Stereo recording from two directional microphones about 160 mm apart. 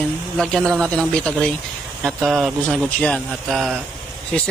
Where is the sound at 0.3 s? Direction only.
5° left (ahead or behind).